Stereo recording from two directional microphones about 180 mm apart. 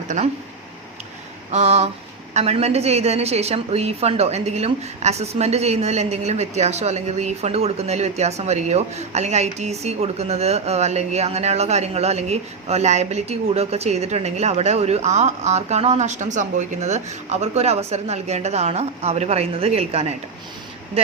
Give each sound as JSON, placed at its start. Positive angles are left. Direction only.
{"t": 0.2, "sound": "speech", "side_deg": -45}
{"t": 1.5, "sound": "a woman's voice", "side_deg": -40}